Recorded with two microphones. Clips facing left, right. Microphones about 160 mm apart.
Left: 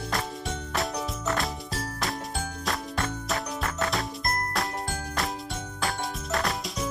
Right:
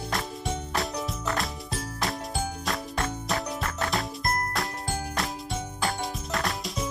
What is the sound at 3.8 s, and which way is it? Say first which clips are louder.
Music: right 1 dB; centre (ahead or behind).